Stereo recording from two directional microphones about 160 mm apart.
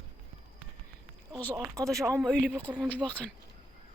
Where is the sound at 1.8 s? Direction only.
20° right (ahead or behind).